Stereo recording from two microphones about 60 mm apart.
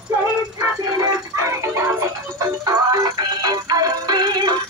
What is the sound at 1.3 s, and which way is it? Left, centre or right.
Music, right.